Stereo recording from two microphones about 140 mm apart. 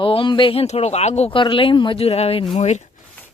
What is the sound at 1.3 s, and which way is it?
Speech, 35° left (ahead or behind).